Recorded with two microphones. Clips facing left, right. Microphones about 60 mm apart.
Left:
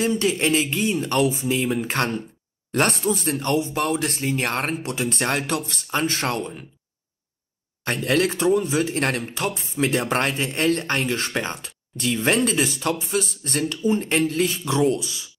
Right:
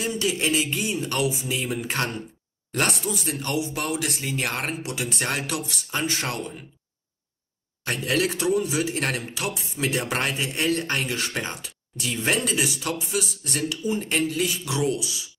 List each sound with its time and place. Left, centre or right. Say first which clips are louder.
0.0 s a man's voice: left 4 dB; left
7.8 s a man's voice: left 3 dB; left